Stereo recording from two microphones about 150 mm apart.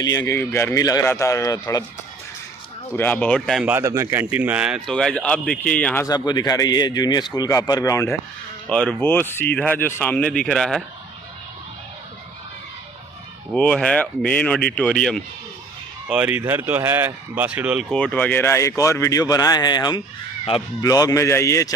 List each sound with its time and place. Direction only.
0.0 s speech: 20° left (ahead or behind)
3.0 s speech: 10° left (ahead or behind)
3.6 s speech: 15° right (ahead or behind); by 6.0 s 10° left (ahead or behind)
6.0 s speech: 25° left (ahead or behind)
8.6 s speech: 5° left (ahead or behind)
13.5 s speech: 5° left (ahead or behind)
16.1 s speech: 10° right (ahead or behind)
17.8 s speech: 5° left (ahead or behind); by 20.0 s 30° left (ahead or behind)
20.5 s speech: 40° left (ahead or behind)
20.8 s speech: 25° left (ahead or behind)